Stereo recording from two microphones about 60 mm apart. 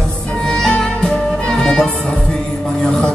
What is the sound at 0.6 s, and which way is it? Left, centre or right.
Music, centre.